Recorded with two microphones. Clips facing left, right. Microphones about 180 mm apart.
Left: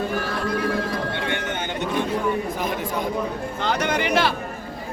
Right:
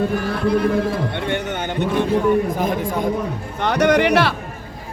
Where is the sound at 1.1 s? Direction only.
50° right (ahead or behind).